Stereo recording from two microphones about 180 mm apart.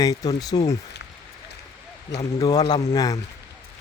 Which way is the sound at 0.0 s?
20° left (ahead or behind).